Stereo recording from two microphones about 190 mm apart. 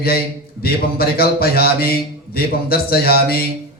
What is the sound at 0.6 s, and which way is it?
A man's voice, 55° left (ahead or behind).